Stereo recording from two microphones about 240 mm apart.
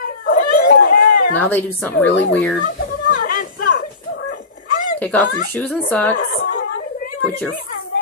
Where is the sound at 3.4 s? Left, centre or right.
Left.